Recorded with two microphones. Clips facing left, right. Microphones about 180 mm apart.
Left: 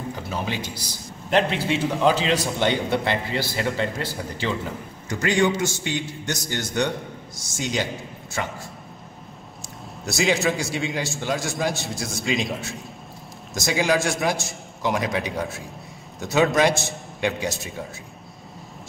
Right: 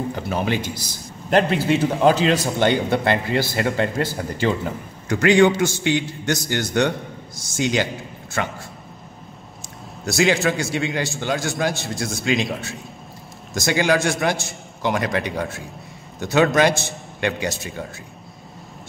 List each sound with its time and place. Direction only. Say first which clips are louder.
0.1 s a man's voice: right 6 dB; 60° right (ahead or behind)
1.3 s a man's voice: right 4 dB; centre (ahead or behind)
3.0 s speech: right 5 dB; 50° right (ahead or behind)
5.1 s a man's voice: right 6 dB; 70° right (ahead or behind)
7.3 s a man's voice: right 5 dB; centre (ahead or behind)
10.0 s a man's voice: right 3 dB; centre (ahead or behind)